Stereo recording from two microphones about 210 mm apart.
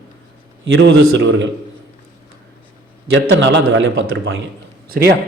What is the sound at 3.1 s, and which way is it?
A man's voice, 65° right (ahead or behind).